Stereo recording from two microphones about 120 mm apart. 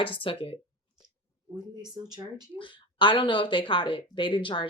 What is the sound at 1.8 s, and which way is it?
Speech, 35° right (ahead or behind).